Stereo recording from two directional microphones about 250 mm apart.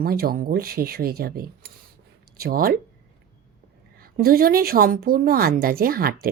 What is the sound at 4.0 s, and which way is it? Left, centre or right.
Speech, right.